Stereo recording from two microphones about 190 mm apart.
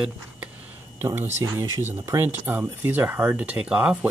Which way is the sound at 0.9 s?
15° right (ahead or behind).